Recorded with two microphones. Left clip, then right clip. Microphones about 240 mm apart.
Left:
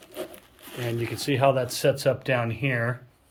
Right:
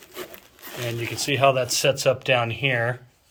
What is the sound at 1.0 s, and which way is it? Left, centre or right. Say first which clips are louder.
Speech: right 3 dB; centre.